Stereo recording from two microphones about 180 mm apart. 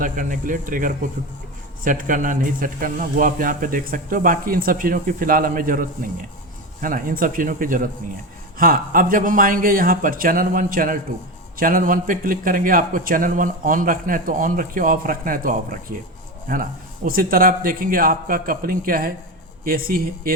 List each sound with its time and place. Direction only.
0.0 s a man's voice: 45° right (ahead or behind)
17.1 s a man's voice: 55° right (ahead or behind)